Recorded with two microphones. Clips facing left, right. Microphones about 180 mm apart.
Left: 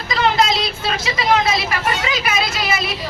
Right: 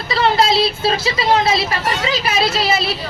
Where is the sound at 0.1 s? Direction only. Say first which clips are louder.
Right 2 dB; 30° right (ahead or behind).